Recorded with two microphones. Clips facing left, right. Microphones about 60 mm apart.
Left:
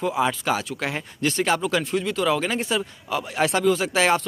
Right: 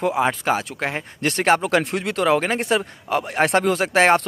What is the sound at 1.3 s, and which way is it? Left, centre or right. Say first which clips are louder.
Speech: right 4 dB; right.